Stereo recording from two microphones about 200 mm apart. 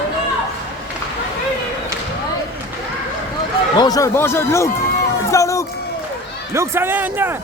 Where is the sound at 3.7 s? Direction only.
20° left (ahead or behind).